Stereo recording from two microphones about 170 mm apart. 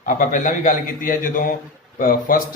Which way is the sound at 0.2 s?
50° left (ahead or behind).